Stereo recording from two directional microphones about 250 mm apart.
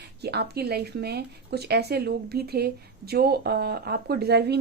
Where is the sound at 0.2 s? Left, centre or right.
Right.